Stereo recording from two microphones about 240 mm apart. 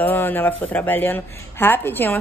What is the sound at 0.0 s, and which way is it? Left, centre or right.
A woman's voice, centre.